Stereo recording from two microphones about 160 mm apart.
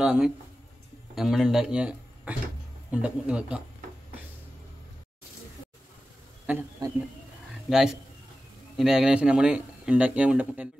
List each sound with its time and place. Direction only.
0.0 s speech: 5° right (ahead or behind)
6.8 s a man's voice: 20° right (ahead or behind)
7.7 s speech: 5° right (ahead or behind)